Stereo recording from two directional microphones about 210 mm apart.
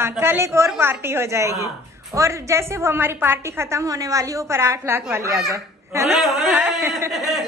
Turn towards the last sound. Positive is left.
turn(degrees=0)  # may be behind; listen again after turning